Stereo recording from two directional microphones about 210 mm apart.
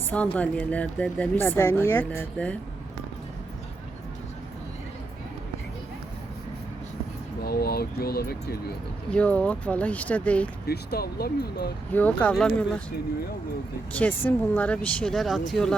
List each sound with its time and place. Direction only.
0.3 s speech: 5° left (ahead or behind)
7.4 s speech: 45° left (ahead or behind)
9.0 s speech: 5° left (ahead or behind)
10.7 s speech: 50° left (ahead or behind)
11.9 s speech: 5° left (ahead or behind)
13.9 s speech: 10° left (ahead or behind)